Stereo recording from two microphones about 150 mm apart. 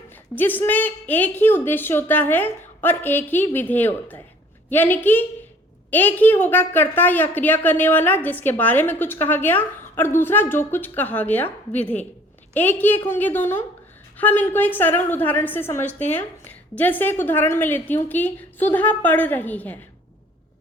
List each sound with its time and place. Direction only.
0.3 s a woman's voice: 15° left (ahead or behind)